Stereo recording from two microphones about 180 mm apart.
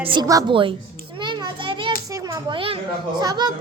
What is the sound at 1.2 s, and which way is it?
Children playing, 25° right (ahead or behind).